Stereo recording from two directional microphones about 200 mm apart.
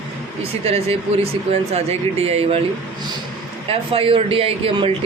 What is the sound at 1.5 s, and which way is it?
Speech, 30° right (ahead or behind).